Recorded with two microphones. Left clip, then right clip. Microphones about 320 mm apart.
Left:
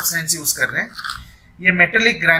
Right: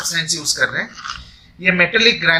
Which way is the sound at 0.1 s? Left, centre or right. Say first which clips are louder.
Right 2 dB; centre.